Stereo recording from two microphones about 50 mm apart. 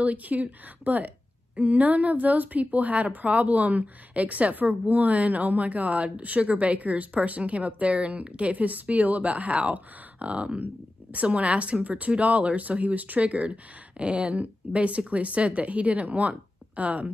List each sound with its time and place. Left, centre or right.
0.0 s a woman's voice: right